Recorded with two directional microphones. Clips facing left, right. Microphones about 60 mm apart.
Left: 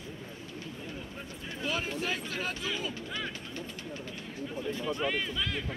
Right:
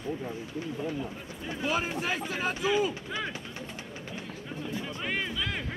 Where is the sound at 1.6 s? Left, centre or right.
Centre.